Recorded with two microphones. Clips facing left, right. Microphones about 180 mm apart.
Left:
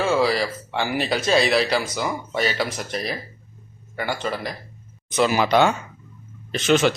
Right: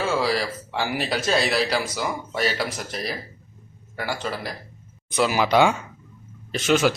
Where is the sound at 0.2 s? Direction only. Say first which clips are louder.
Left 3 dB; centre (ahead or behind).